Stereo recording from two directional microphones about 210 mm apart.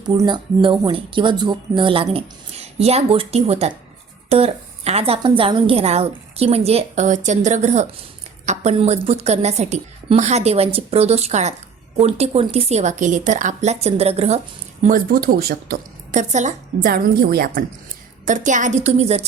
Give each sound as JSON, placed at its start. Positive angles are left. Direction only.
{"t": 0.1, "sound": "a woman's voice", "side_deg": -20}